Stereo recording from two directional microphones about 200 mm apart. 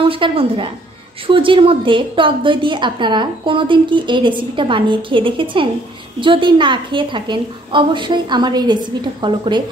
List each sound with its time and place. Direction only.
0.1 s a woman's voice: 25° right (ahead or behind)